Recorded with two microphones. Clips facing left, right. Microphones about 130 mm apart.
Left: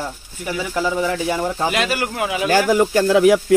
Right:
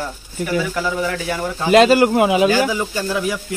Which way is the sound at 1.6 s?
30° right (ahead or behind).